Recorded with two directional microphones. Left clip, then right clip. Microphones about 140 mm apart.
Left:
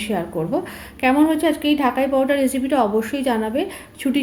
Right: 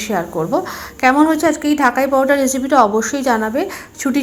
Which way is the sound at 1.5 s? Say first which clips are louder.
Right 4 dB; 15° left (ahead or behind).